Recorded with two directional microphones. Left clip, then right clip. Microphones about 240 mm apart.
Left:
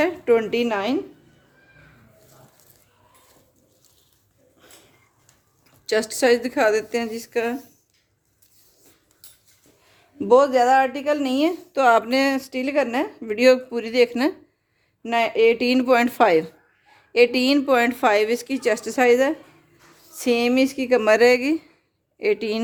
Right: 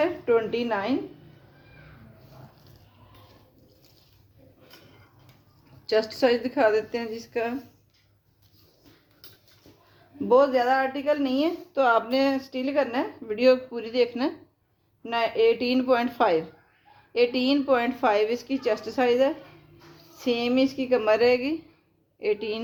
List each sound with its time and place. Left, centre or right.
0.0 s a woman's voice: left
5.8 s speech: left
10.2 s speech: left